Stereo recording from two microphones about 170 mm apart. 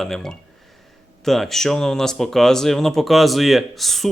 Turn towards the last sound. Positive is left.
turn(degrees=0)  # may be behind; listen again after turning